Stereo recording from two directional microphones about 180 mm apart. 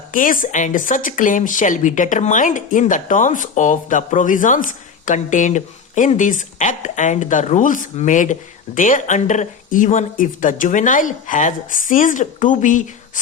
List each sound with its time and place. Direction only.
0.1 s speech: 50° left (ahead or behind)